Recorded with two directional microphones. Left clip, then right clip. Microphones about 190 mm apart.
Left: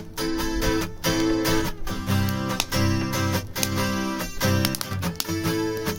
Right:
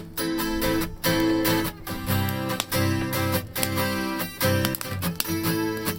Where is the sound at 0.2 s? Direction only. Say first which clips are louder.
Even; 25° right (ahead or behind).